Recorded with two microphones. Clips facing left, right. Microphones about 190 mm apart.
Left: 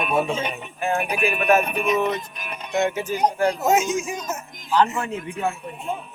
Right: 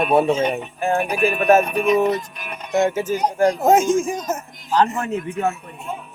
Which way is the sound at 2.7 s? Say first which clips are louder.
Right 4 dB; 45° right (ahead or behind).